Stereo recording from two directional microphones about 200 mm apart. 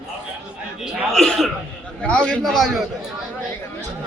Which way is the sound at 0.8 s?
Centre (ahead or behind).